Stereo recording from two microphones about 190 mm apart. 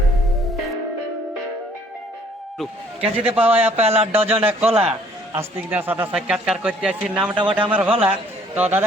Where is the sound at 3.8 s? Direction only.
35° right (ahead or behind).